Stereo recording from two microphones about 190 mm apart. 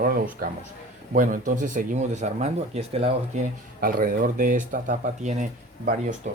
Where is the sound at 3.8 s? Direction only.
50° right (ahead or behind).